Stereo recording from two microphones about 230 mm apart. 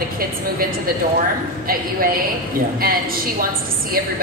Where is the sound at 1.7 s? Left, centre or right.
Right.